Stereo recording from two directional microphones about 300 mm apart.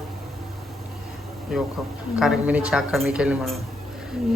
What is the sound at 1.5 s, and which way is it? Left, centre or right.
A woman's voice, centre.